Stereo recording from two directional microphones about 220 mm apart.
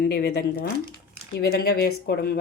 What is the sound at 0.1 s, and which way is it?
Speech, 50° left (ahead or behind).